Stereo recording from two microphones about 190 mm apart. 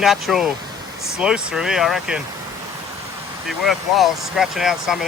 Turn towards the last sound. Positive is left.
turn(degrees=0)  # may be behind; listen again after turning